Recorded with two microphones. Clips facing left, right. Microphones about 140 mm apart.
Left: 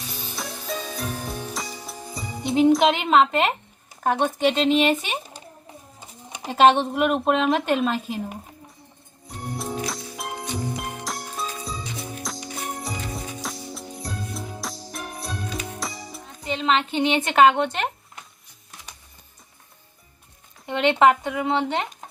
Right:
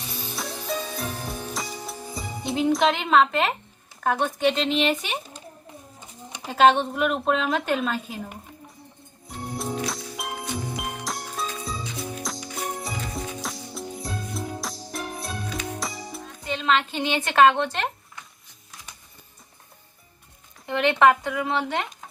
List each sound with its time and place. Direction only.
0.3 s music: centre (ahead or behind)
2.8 s a woman's voice: 20° left (ahead or behind)
6.5 s a woman's voice: 25° left (ahead or behind)
9.2 s music: centre (ahead or behind)
16.4 s a woman's voice: 20° left (ahead or behind)
20.7 s a woman's voice: 20° left (ahead or behind)